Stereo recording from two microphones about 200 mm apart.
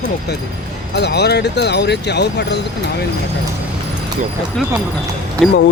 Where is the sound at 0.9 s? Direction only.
55° left (ahead or behind).